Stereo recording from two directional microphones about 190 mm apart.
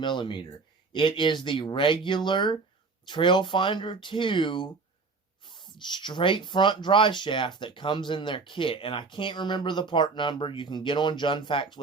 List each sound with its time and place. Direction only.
0.0 s speech: 25° left (ahead or behind)